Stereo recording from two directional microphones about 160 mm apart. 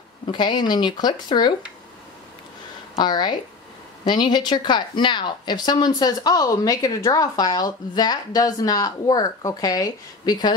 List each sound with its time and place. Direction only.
0.3 s a woman's voice: 30° left (ahead or behind)
3.0 s a woman's voice: 25° left (ahead or behind)